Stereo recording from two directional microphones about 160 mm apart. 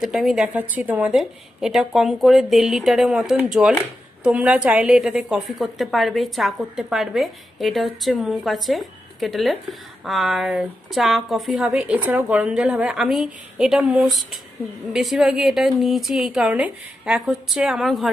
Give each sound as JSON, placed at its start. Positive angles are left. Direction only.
{"t": 0.0, "sound": "a woman's voice", "side_deg": -5}